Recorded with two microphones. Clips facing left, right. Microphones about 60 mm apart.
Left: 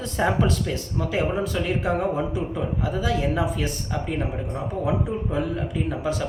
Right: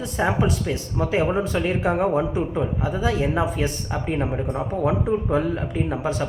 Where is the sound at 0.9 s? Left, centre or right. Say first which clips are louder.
Right 4 dB; right.